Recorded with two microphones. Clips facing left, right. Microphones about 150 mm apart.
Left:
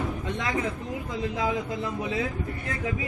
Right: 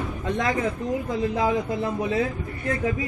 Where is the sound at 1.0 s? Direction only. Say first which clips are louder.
Right 3 dB; 40° right (ahead or behind).